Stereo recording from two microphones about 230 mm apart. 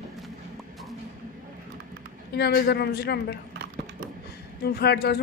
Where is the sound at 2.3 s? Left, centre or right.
Left.